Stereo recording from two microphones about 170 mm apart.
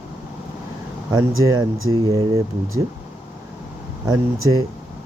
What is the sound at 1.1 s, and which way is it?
Speech, 20° right (ahead or behind).